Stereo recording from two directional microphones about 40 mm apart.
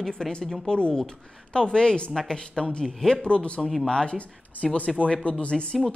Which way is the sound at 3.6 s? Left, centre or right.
Centre.